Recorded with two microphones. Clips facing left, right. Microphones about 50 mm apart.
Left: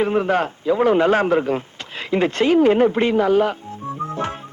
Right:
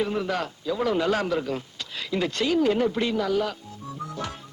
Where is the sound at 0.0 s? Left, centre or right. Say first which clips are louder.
Left 8 dB; left.